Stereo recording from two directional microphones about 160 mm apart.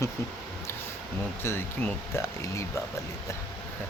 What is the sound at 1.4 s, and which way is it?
Speech, 15° left (ahead or behind).